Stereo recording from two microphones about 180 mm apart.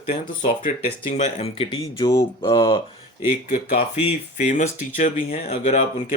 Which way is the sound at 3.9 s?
40° left (ahead or behind).